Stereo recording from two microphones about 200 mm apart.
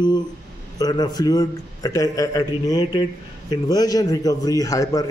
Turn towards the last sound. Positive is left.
turn(degrees=15)  # may be behind; listen again after turning